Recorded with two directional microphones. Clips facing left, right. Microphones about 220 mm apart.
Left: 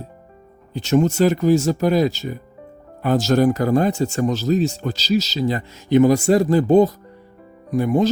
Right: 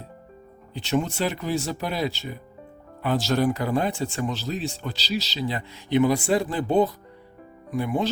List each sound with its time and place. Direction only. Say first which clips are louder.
0.7 s speech: left 8 dB; 45° left (ahead or behind)